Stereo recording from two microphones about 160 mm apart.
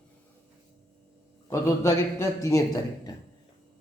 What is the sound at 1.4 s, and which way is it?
A man's voice, 20° left (ahead or behind).